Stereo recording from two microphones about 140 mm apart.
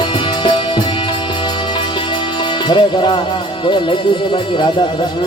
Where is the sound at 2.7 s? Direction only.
30° left (ahead or behind).